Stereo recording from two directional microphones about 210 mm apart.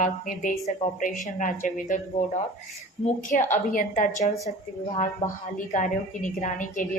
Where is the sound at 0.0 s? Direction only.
40° left (ahead or behind).